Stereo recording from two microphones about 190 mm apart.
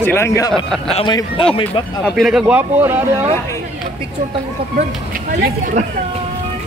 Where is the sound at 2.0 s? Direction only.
Centre (ahead or behind).